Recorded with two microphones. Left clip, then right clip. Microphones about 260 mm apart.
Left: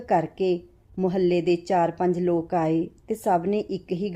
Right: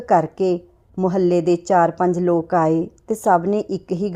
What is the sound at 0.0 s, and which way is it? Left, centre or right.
A woman's voice, centre.